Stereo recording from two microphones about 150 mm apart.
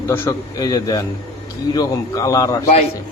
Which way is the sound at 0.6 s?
25° left (ahead or behind).